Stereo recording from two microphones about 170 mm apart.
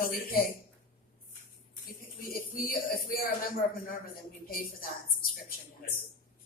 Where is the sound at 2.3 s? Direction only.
55° left (ahead or behind).